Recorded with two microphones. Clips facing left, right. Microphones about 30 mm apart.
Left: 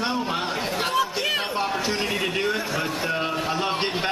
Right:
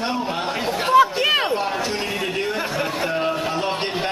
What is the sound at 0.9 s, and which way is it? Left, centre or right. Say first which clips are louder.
Chatter: right 11 dB; right.